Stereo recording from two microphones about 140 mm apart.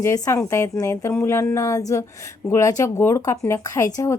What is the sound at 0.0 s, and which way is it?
Speech, 20° left (ahead or behind).